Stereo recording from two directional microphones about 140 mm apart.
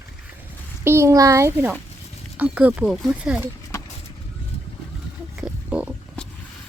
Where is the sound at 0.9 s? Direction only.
20° right (ahead or behind).